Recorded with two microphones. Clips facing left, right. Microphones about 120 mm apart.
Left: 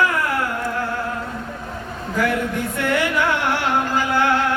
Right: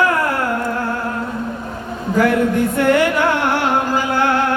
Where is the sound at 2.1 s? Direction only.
50° right (ahead or behind).